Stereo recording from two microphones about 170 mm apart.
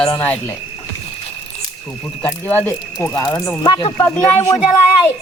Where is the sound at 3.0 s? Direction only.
25° left (ahead or behind).